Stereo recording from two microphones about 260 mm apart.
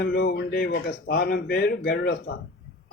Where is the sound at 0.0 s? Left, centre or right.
Left.